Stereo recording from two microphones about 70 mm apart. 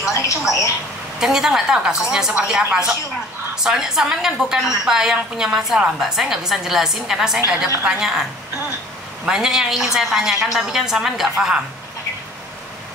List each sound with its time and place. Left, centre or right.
0.1 s a woman's voice: left
1.2 s a woman's voice: centre